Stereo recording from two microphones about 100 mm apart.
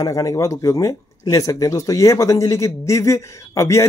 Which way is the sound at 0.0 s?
35° left (ahead or behind).